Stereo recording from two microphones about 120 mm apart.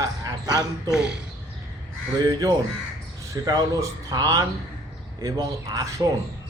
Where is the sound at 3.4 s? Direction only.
30° right (ahead or behind).